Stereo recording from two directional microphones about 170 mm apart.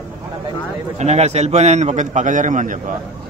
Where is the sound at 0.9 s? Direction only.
40° right (ahead or behind).